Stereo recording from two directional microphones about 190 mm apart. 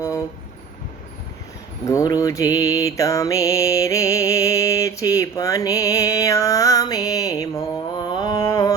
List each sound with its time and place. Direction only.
1.8 s mantra: 15° left (ahead or behind)